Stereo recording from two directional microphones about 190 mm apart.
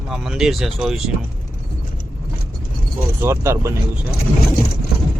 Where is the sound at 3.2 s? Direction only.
15° right (ahead or behind).